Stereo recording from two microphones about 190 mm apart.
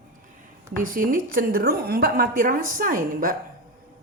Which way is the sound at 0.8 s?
45° right (ahead or behind).